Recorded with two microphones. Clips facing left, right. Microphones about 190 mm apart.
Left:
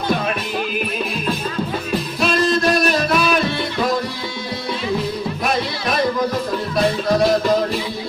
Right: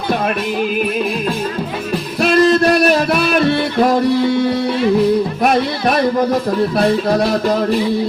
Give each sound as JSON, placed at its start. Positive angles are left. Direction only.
{"t": 2.2, "sound": "music", "side_deg": -70}
{"t": 5.4, "sound": "music", "side_deg": -60}